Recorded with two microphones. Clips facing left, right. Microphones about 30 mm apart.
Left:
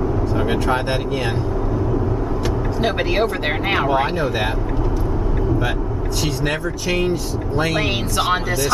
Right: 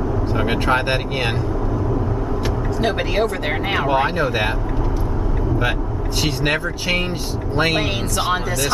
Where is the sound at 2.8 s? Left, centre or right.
Centre.